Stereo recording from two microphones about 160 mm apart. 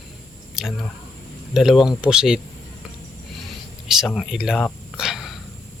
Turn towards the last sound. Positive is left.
turn(degrees=0)  # may be behind; listen again after turning